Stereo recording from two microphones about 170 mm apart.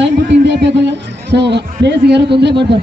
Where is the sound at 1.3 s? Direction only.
85° right.